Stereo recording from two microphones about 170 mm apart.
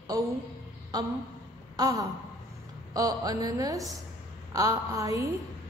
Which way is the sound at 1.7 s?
20° right (ahead or behind).